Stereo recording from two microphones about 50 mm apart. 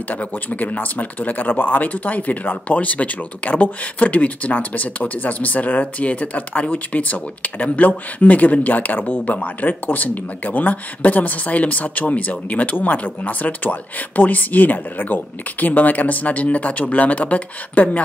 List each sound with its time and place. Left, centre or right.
0.1 s speech: left